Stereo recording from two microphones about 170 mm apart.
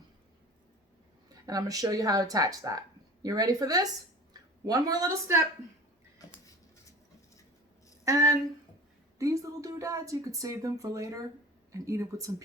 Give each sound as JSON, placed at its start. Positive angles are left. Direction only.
{"t": 1.5, "sound": "speech", "side_deg": -20}
{"t": 6.2, "sound": "a sound", "side_deg": 20}
{"t": 8.0, "sound": "speech", "side_deg": -20}